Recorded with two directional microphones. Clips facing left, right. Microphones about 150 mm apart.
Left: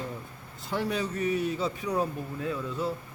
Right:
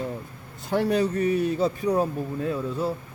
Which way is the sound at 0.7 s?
50° right (ahead or behind).